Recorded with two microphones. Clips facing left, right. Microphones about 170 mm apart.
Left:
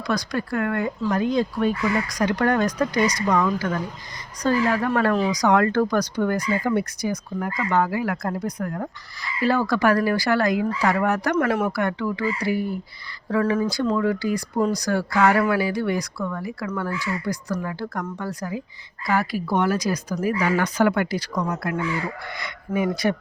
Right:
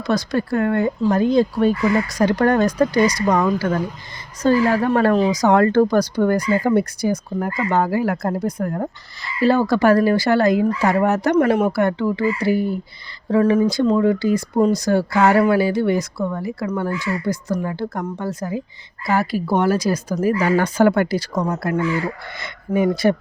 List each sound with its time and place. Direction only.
0.1 s speech: 25° right (ahead or behind)